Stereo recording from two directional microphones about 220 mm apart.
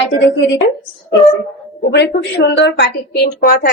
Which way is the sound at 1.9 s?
50° left (ahead or behind).